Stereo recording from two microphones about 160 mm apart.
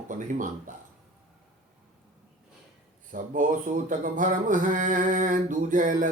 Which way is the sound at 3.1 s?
55° right (ahead or behind).